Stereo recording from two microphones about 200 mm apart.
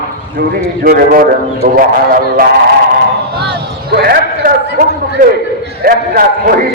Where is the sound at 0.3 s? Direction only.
50° right (ahead or behind).